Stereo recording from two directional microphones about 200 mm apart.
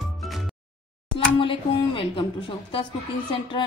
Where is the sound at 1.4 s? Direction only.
25° left (ahead or behind).